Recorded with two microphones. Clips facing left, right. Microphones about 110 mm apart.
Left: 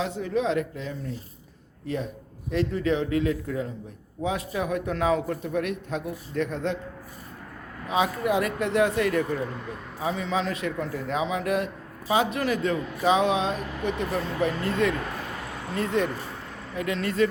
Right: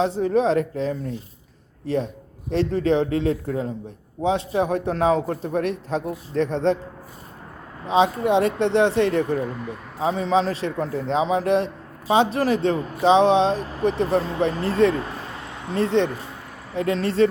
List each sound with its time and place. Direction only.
0.0 s speech: 35° right (ahead or behind)
7.9 s speech: 25° right (ahead or behind)